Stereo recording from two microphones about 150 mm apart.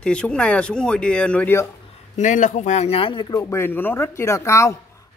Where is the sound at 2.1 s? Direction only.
55° left (ahead or behind); by 3.4 s 30° left (ahead or behind).